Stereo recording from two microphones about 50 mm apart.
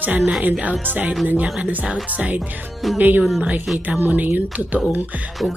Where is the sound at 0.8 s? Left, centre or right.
Right.